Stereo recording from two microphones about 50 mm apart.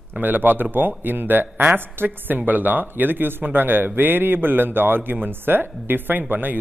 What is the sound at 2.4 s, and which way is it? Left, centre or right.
A man's voice, right.